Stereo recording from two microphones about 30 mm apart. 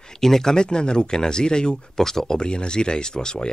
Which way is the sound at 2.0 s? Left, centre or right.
Centre.